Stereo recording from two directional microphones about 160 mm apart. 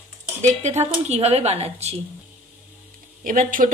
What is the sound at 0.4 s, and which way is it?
Speech, 45° right (ahead or behind).